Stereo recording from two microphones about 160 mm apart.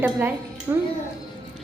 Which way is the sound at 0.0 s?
10° right (ahead or behind).